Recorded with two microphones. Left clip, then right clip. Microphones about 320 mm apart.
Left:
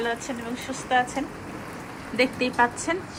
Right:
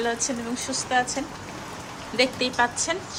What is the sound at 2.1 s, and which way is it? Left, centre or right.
Speech, right.